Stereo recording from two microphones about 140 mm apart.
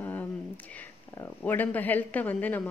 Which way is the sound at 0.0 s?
15° left (ahead or behind).